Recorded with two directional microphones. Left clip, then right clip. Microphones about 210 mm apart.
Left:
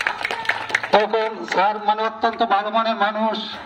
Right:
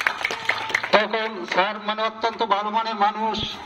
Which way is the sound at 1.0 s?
45° left (ahead or behind).